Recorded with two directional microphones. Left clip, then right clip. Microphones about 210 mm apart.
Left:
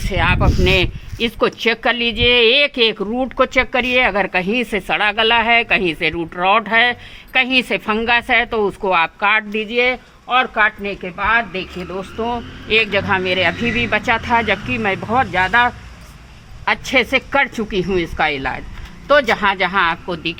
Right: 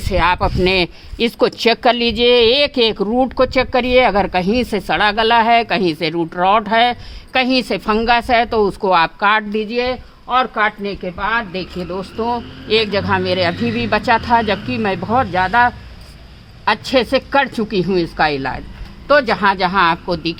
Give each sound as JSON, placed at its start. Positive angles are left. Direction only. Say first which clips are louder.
{"t": 0.1, "sound": "a woman's voice", "louder": "right 3 dB", "side_deg": -55}
{"t": 16.9, "sound": "a woman's voice", "louder": "even", "side_deg": -40}
{"t": 19.7, "sound": "speech", "louder": "right 2 dB", "side_deg": -45}